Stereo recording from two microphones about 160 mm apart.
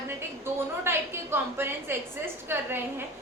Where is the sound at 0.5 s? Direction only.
15° right (ahead or behind).